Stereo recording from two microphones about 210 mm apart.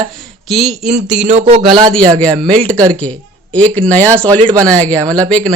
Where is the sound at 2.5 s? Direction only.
5° left (ahead or behind).